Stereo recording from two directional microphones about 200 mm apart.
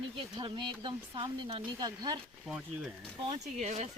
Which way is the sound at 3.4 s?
35° right (ahead or behind).